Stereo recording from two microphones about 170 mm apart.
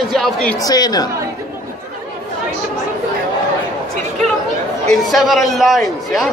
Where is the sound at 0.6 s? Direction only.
20° left (ahead or behind).